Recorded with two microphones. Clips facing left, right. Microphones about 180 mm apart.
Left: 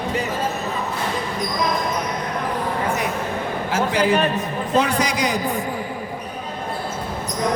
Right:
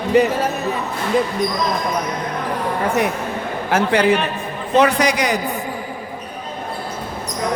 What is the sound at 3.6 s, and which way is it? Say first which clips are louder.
A man's voice: right 4 dB; 60° right (ahead or behind).